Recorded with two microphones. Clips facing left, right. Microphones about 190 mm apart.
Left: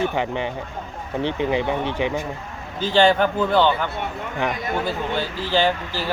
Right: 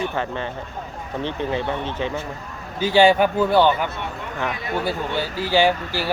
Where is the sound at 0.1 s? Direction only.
15° left (ahead or behind).